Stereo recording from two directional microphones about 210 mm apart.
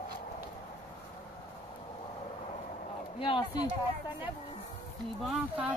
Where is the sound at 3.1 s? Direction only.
25° left (ahead or behind).